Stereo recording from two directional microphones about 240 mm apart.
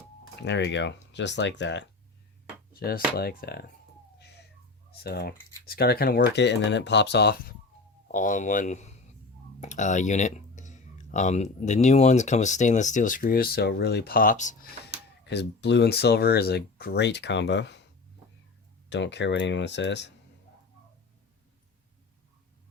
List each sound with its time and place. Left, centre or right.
0.4 s speech: left
4.2 s a sound: left
5.0 s speech: left
8.0 s speech: left
15.3 s speech: left
18.9 s speech: left